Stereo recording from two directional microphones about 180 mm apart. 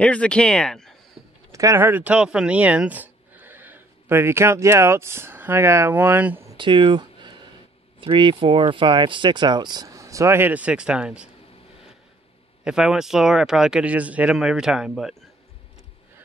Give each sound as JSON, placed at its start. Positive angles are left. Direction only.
{"t": 0.0, "sound": "speech", "side_deg": 5}
{"t": 1.5, "sound": "speech", "side_deg": -20}
{"t": 6.5, "sound": "a sound", "side_deg": -25}
{"t": 8.0, "sound": "speech", "side_deg": -30}
{"t": 12.6, "sound": "speech", "side_deg": -5}